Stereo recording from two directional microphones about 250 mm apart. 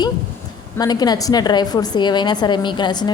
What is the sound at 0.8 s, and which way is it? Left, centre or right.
A woman's voice, centre.